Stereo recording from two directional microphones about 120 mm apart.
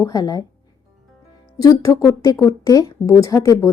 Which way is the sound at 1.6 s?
30° left (ahead or behind).